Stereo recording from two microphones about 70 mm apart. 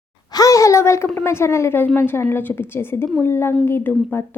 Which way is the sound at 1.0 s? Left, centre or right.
Left.